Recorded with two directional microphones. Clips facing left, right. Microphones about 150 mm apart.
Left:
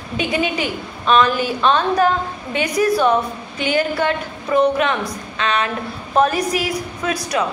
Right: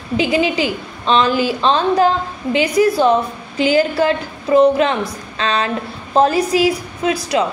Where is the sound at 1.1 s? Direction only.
25° right (ahead or behind).